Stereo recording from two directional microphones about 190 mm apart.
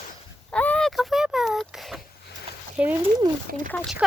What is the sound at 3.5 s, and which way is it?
Speech, 50° right (ahead or behind).